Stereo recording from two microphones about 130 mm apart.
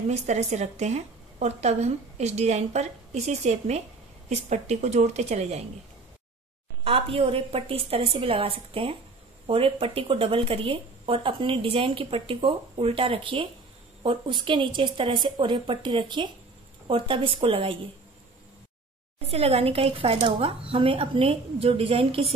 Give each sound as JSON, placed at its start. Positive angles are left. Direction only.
{"t": 0.1, "sound": "a woman's voice", "side_deg": -60}
{"t": 6.8, "sound": "speech", "side_deg": -45}
{"t": 19.2, "sound": "speech", "side_deg": -50}